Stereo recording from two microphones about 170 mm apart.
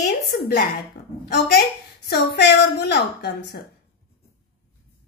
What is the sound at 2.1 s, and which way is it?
Speech, 75° left (ahead or behind).